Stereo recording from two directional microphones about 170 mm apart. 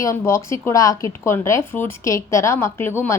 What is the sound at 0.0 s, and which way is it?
Speech, 15° left (ahead or behind).